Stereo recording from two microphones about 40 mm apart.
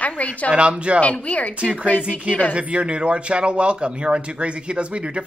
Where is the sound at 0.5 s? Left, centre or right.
Right.